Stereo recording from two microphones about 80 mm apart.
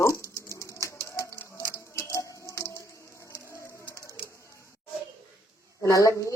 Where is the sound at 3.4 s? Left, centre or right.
Left.